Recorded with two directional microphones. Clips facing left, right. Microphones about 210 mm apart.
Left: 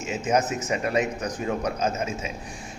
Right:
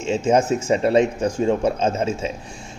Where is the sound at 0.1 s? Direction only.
30° right (ahead or behind).